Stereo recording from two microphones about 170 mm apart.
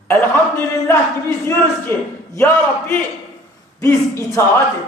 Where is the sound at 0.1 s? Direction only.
15° left (ahead or behind).